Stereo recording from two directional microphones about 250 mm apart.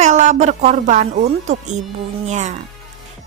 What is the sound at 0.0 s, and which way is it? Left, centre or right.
Music, right.